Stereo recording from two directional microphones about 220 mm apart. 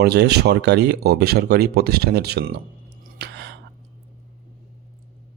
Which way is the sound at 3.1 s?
50° right (ahead or behind).